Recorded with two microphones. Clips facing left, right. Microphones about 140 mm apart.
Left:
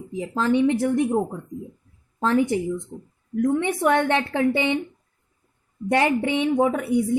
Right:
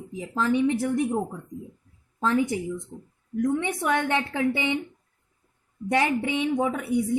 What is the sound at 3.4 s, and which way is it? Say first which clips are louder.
A woman's voice: left 4 dB; 55° left (ahead or behind).